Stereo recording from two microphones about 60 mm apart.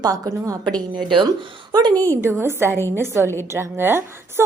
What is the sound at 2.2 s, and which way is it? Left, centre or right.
A woman's voice, right.